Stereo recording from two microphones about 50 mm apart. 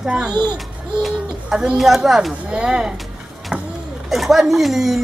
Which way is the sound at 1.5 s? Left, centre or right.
Centre.